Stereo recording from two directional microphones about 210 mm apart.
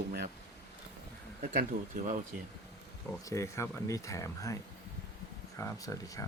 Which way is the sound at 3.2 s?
15° left (ahead or behind).